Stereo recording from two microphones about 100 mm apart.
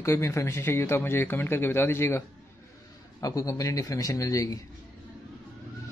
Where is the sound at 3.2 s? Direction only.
35° left (ahead or behind).